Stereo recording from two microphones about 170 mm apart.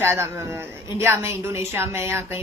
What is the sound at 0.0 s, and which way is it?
A woman's voice, 15° right (ahead or behind).